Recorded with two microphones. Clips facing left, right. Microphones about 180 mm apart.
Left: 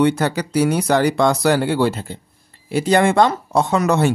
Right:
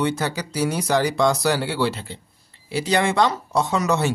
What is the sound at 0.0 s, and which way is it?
Speech, 55° left (ahead or behind).